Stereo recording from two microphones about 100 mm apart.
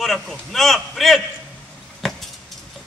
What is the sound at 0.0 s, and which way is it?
A man's voice, centre (ahead or behind).